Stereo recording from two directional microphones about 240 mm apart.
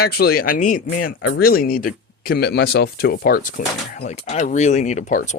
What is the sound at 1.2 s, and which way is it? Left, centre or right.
Speech, left.